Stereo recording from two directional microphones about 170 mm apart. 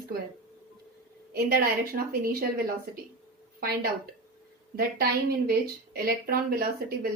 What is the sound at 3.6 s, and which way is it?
Speech, 65° right (ahead or behind).